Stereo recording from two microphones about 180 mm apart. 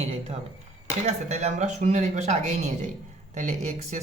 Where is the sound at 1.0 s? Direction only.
35° right (ahead or behind).